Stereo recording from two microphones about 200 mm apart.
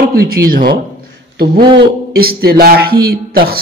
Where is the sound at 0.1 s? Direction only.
50° right (ahead or behind).